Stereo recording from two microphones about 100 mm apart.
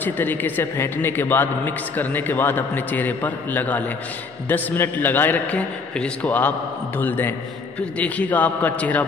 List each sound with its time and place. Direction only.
0.0 s a man's voice: 20° left (ahead or behind)